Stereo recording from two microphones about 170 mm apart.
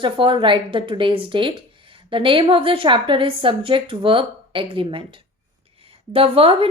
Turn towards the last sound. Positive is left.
turn(degrees=-30)  # may be behind; listen again after turning